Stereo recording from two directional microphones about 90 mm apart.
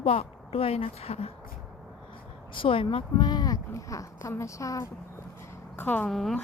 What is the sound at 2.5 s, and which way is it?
Speech, 75° left (ahead or behind).